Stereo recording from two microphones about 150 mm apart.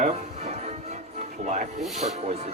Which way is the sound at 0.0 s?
50° right (ahead or behind).